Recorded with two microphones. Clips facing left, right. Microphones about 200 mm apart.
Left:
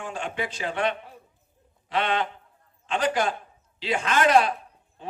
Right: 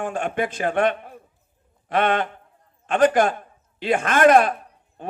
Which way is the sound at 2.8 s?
55° right (ahead or behind).